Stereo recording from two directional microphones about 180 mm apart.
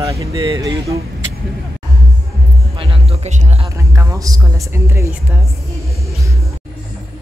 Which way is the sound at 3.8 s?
20° right (ahead or behind).